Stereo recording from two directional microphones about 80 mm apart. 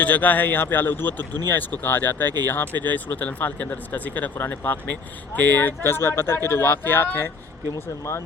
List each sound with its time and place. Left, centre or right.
0.0 s speech: centre
7.7 s speech: left